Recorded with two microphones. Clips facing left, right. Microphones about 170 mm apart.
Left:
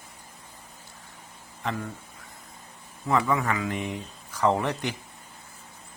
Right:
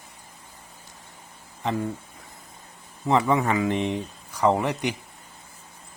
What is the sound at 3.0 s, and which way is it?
Speech, 25° right (ahead or behind).